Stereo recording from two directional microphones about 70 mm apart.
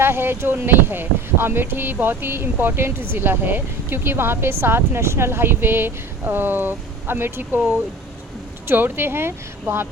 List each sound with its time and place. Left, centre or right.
0.0 s speech: right